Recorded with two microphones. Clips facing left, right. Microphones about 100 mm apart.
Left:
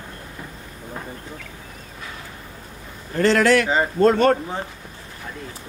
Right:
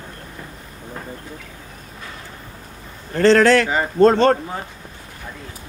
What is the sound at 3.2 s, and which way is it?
Speech, 35° right (ahead or behind).